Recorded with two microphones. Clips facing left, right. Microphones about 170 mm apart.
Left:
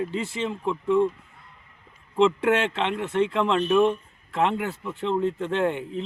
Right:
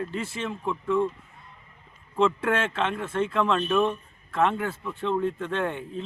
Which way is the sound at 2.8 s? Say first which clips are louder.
Left 3 dB; 20° left (ahead or behind).